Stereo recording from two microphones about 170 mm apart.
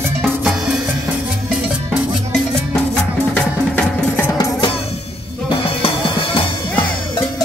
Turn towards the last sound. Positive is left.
turn(degrees=30)  # may be behind; listen again after turning